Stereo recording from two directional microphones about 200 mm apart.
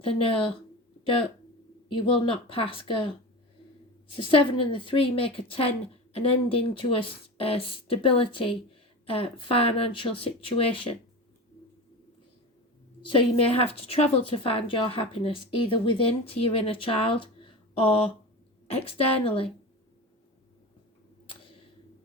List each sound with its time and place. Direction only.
0.0 s a woman's voice: 25° left (ahead or behind)
4.2 s a woman's voice: 25° left (ahead or behind)
13.0 s a woman's voice: 25° left (ahead or behind)